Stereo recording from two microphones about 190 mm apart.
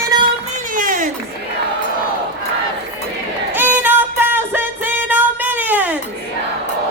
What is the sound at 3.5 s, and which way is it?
Music, 10° right (ahead or behind).